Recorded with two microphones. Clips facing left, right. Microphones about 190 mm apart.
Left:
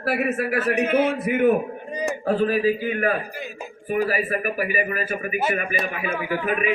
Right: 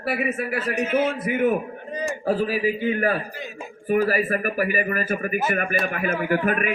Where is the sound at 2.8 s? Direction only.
30° right (ahead or behind).